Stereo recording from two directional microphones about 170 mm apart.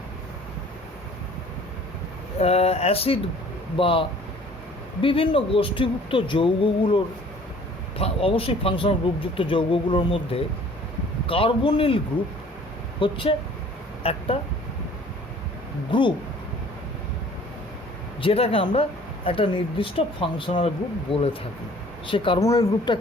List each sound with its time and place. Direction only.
2.4 s speech: 35° left (ahead or behind)
5.0 s speech: 30° left (ahead or behind)
13.0 s speech: 30° left (ahead or behind)
15.9 s speech: 30° left (ahead or behind)
18.2 s speech: 35° left (ahead or behind)